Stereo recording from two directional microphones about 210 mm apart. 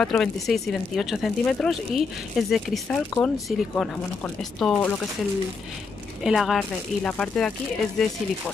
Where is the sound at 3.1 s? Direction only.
15° left (ahead or behind).